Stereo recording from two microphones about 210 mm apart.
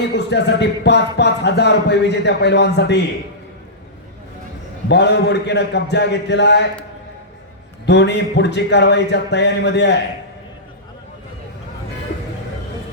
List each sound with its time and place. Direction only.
0.2 s speech: 55° left (ahead or behind)
4.9 s speech: 55° left (ahead or behind)
7.9 s speech: 55° left (ahead or behind)